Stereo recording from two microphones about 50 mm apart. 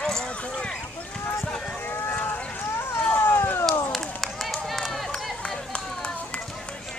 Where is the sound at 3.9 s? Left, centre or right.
Centre.